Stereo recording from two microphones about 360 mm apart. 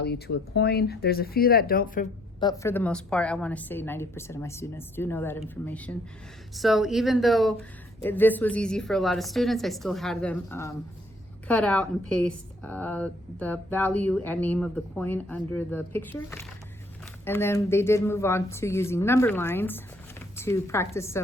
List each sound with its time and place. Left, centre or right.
0.0 s speech: left
2.4 s a woman's voice: centre